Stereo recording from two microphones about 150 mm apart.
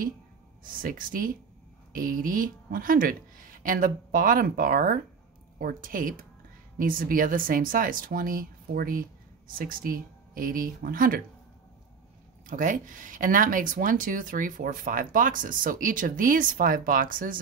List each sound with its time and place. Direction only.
0.7 s a woman's voice: 70° right (ahead or behind)
12.4 s speech: 60° right (ahead or behind)